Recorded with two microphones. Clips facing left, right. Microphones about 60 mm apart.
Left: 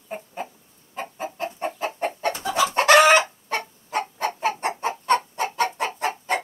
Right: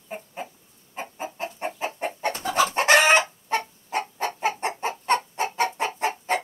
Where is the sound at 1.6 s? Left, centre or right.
Right.